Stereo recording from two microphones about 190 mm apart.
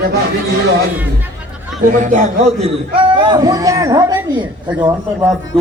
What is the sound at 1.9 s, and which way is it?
Speech, 40° right (ahead or behind).